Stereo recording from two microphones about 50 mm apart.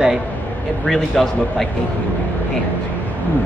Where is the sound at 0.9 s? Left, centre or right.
Centre.